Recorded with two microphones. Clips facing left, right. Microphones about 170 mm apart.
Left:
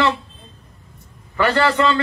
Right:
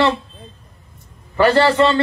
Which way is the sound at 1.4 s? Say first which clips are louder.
Right 4 dB; 35° right (ahead or behind).